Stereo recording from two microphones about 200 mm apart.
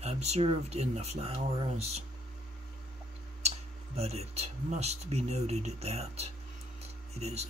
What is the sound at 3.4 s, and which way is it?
Speech, 30° right (ahead or behind).